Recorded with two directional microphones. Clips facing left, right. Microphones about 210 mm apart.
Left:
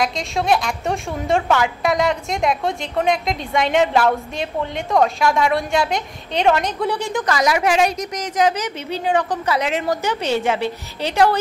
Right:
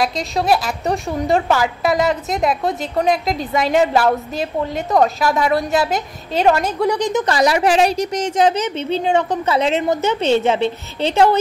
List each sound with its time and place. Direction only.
0.0 s a woman's voice: centre (ahead or behind)
6.9 s speech: 20° right (ahead or behind)
7.2 s a woman's voice: 30° right (ahead or behind)